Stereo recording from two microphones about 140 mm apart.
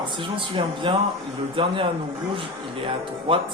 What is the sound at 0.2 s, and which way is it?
Speech, 35° right (ahead or behind).